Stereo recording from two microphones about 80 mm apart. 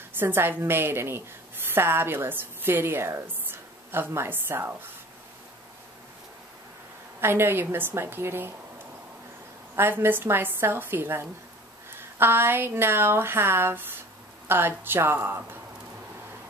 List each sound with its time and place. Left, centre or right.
0.2 s a woman's voice: right
7.2 s speech: right
9.8 s speech: right